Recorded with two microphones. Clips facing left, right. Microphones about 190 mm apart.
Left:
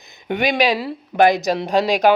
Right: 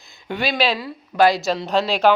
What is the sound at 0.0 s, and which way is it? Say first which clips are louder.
Speech: left 4 dB; 20° left (ahead or behind).